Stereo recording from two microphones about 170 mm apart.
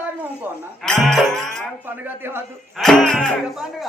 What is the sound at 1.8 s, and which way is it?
Speech, 10° right (ahead or behind).